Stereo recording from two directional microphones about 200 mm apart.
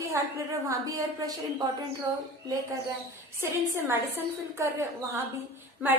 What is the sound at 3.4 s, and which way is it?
A woman's voice, 10° right (ahead or behind).